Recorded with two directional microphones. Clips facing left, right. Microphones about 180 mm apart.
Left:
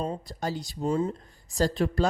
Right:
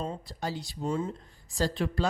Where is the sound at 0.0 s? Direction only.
40° left (ahead or behind).